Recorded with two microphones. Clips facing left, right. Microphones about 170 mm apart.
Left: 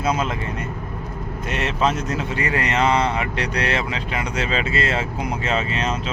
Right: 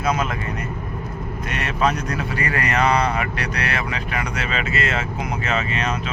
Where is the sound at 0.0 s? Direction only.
30° left (ahead or behind).